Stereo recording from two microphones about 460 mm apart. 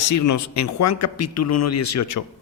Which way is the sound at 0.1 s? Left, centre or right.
Left.